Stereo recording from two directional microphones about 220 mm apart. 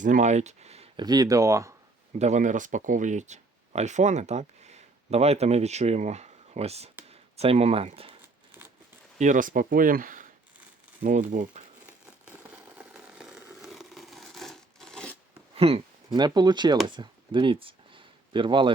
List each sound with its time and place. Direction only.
0.0 s speech: 35° right (ahead or behind); by 1.7 s 15° right (ahead or behind)
2.1 s speech: 30° right (ahead or behind)
9.1 s speech: 35° right (ahead or behind)
12.2 s a sound: 5° right (ahead or behind)
15.5 s speech: 25° right (ahead or behind)
16.8 s a sound: 20° right (ahead or behind)